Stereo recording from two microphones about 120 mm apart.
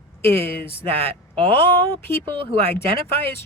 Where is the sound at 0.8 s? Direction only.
55° right (ahead or behind).